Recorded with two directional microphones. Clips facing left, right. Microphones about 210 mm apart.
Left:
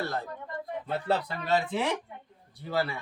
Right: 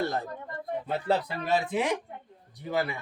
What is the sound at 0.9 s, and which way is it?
Speech, 15° right (ahead or behind).